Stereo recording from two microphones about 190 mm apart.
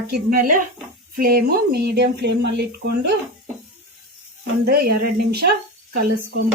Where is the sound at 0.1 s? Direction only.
50° right (ahead or behind).